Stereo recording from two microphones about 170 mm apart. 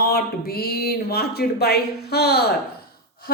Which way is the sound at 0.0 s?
65° left (ahead or behind).